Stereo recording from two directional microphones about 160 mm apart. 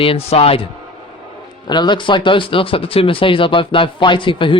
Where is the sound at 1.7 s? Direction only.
30° left (ahead or behind).